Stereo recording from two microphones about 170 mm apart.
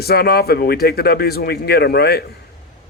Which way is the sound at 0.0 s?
65° left (ahead or behind).